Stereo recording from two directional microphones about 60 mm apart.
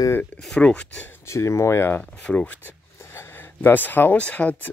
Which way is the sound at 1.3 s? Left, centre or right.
Left.